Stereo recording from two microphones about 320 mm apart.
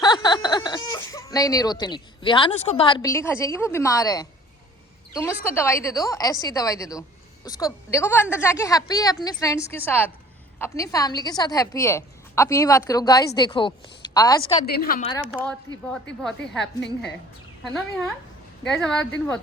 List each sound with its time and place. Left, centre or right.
0.0 s a sound: centre
0.9 s a woman's voice: centre
14.7 s a woman's voice: left
16.2 s speech: centre
18.6 s speech: centre